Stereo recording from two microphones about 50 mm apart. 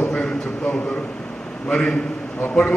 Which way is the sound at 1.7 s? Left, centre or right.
Centre.